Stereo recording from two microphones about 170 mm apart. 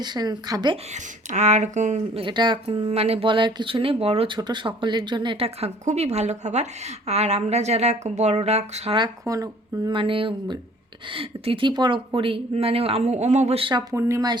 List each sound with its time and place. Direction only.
0.0 s speech: 25° right (ahead or behind)
0.9 s speech: 45° right (ahead or behind)
2.2 s speech: 25° right (ahead or behind)
2.9 s speech: 35° right (ahead or behind)
9.2 s speech: 20° right (ahead or behind)
13.9 s speech: 20° right (ahead or behind)